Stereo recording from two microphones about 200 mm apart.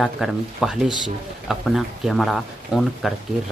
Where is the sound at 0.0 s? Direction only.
Centre (ahead or behind).